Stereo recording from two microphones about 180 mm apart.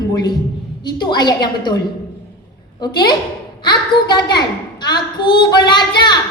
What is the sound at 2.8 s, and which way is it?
A woman's voice, 25° left (ahead or behind).